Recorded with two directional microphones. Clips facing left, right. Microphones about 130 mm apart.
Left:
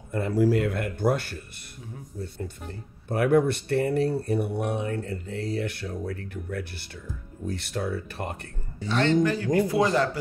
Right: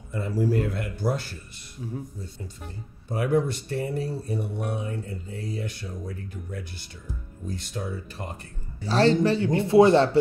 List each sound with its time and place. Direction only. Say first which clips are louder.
0.1 s speech: left 3 dB; 65° left (ahead or behind); by 0.7 s 85° left
0.7 s speech: left 3 dB; 55° left (ahead or behind)
3.1 s speech: left 3 dB; 60° left (ahead or behind)
8.8 s a man's voice: right 2 dB; 35° right (ahead or behind)